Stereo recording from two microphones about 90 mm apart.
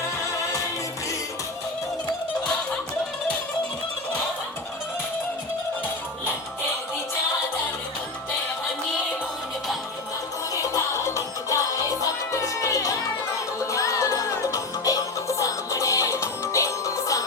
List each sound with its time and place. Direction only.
10.5 s music: 35° left (ahead or behind)